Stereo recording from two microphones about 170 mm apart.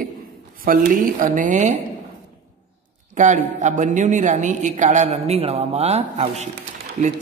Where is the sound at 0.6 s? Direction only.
55° right (ahead or behind).